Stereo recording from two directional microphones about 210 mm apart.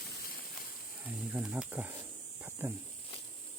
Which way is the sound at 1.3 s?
5° right (ahead or behind).